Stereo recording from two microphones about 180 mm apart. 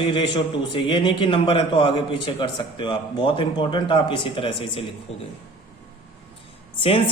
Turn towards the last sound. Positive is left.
turn(degrees=30)  # may be behind; listen again after turning